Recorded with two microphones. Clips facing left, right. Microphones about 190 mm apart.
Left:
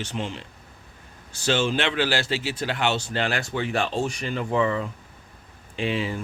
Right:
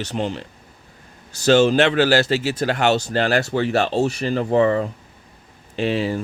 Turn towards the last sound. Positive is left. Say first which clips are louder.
# right 5 dB
turn(degrees=-40)  # may be behind; listen again after turning